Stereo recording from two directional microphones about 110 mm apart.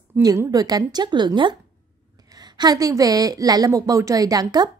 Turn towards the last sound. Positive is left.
turn(degrees=-35)  # may be behind; listen again after turning